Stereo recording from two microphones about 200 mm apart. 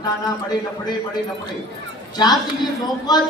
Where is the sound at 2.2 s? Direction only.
20° left (ahead or behind).